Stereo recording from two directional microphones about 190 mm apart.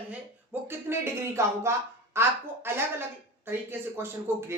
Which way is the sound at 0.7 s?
15° right (ahead or behind).